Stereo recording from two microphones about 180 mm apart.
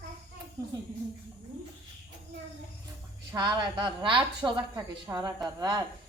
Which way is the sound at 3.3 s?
25° right (ahead or behind).